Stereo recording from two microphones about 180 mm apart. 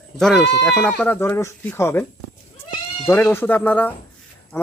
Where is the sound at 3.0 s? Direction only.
10° left (ahead or behind).